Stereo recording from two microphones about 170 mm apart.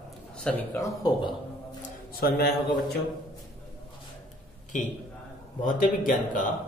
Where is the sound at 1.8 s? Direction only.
60° left (ahead or behind).